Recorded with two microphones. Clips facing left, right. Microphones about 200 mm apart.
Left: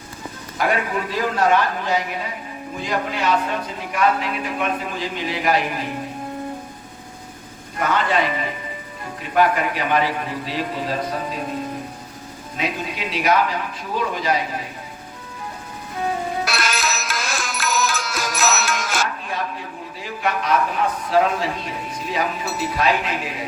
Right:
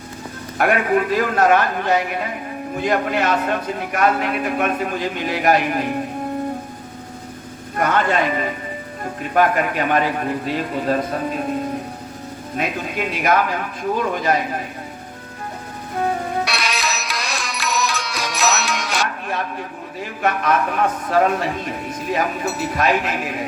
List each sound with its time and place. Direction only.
0.6 s a man's voice: 60° right (ahead or behind)
7.8 s a man's voice: 50° right (ahead or behind)
12.5 s a man's voice: 50° right (ahead or behind)
16.4 s music: centre (ahead or behind)
19.3 s a sound: 55° right (ahead or behind)
21.1 s a man's voice: 50° right (ahead or behind)